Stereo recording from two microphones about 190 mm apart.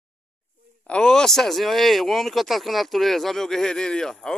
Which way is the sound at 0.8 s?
5° left (ahead or behind).